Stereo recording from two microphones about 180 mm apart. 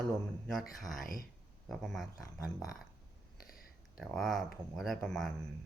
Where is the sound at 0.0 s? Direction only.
Centre (ahead or behind).